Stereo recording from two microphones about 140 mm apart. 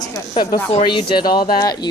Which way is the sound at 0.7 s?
40° left (ahead or behind).